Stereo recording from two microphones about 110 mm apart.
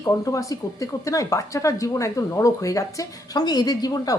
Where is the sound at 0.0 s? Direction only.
30° left (ahead or behind).